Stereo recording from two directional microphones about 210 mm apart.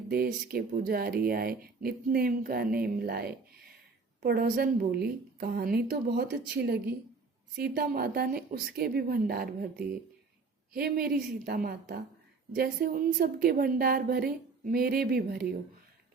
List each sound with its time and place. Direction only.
0.1 s speech: 45° right (ahead or behind)